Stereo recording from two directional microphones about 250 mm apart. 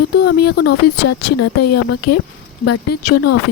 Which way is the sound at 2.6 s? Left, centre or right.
Left.